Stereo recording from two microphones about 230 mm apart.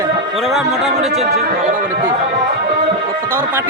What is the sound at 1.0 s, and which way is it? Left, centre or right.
Speech, right.